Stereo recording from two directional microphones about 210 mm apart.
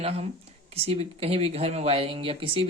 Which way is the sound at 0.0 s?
30° right (ahead or behind).